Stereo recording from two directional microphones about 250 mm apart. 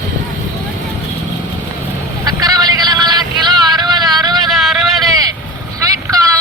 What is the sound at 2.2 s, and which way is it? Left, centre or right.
Vehicle, centre.